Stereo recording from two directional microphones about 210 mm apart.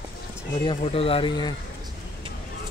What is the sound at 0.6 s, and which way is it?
Speech, 25° left (ahead or behind).